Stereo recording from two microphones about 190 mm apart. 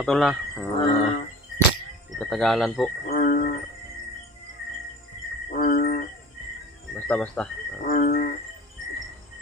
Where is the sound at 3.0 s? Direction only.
45° left (ahead or behind).